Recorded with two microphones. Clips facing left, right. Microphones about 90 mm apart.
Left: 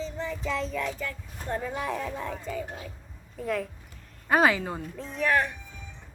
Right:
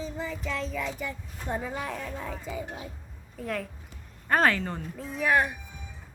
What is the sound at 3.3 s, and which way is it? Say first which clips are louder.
Child singing: left 3 dB; centre (ahead or behind).